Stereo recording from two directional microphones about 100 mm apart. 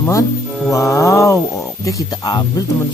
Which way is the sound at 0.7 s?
30° left (ahead or behind).